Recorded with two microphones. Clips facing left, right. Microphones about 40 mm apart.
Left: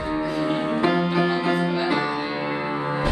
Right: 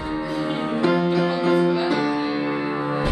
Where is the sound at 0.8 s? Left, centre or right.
Centre.